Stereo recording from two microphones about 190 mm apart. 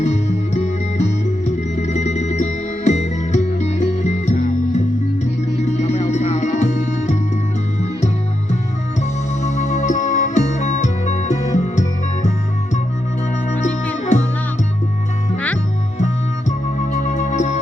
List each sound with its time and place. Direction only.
0.0 s music: 35° left (ahead or behind)
9.4 s music: 40° left (ahead or behind)
16.5 s music: 40° left (ahead or behind)